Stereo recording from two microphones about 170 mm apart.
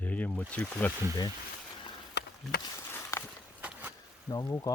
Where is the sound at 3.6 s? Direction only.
10° right (ahead or behind).